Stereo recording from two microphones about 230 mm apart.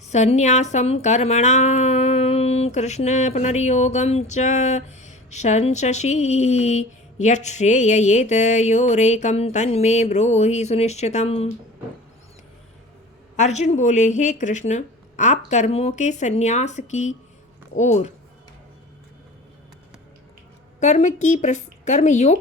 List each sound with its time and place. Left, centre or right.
0.1 s speech: left
13.3 s speech: left
20.7 s speech: left